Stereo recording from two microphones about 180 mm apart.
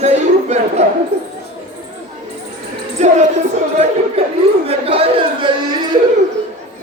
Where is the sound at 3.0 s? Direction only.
40° right (ahead or behind).